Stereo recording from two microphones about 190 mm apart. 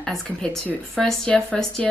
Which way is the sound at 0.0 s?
5° left (ahead or behind).